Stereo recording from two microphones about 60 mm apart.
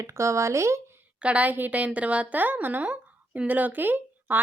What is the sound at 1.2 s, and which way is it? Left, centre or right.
A woman's voice, right.